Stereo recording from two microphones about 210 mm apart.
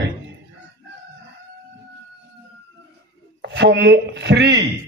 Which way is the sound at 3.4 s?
55° right (ahead or behind).